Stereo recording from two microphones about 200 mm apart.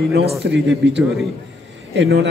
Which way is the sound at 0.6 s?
65° right (ahead or behind).